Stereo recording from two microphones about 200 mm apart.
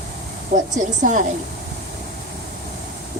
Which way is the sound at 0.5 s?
35° right (ahead or behind).